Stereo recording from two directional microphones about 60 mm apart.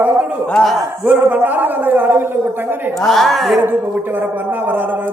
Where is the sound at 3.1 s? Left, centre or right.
Centre.